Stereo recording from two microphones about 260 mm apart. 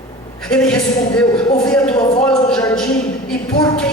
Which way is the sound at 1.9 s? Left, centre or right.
Centre.